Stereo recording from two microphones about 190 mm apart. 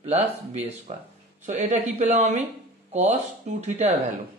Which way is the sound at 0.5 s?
35° right (ahead or behind).